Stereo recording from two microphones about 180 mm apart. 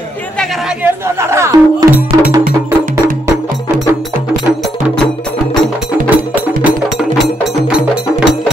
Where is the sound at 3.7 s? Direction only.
15° right (ahead or behind).